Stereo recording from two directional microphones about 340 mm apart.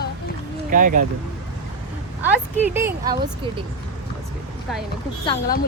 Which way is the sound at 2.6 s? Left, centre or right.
Centre.